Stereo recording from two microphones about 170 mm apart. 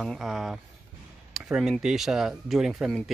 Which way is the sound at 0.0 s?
Centre (ahead or behind).